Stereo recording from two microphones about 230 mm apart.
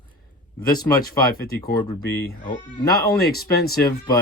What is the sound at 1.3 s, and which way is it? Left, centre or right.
Speech, left.